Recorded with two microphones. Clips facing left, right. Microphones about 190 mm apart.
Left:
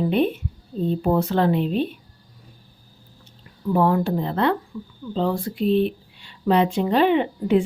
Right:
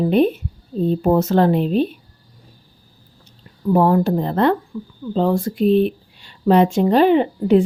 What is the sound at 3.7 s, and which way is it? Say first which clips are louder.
Speech: right 4 dB; 35° right (ahead or behind).